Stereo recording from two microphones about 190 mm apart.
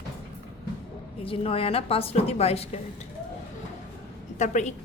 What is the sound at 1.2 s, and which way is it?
A woman's voice, 30° left (ahead or behind).